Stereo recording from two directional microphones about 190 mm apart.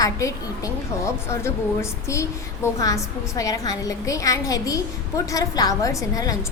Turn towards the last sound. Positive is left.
turn(degrees=20)  # may be behind; listen again after turning